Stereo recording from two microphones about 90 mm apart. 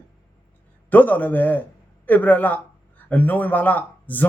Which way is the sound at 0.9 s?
20° left (ahead or behind).